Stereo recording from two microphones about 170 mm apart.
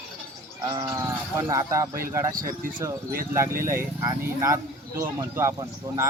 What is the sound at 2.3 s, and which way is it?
Speech, 55° right (ahead or behind).